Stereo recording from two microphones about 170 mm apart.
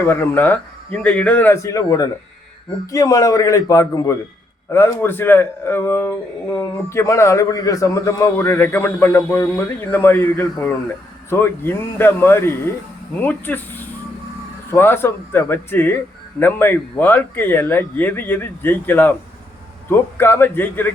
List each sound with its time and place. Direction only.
0.0 s a man's voice: 15° left (ahead or behind)